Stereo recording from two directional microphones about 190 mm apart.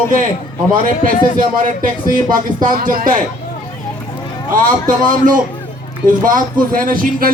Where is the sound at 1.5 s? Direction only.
45° right (ahead or behind).